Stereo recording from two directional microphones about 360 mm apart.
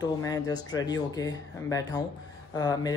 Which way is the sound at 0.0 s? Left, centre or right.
Centre.